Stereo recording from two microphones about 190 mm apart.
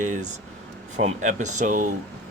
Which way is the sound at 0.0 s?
40° right (ahead or behind).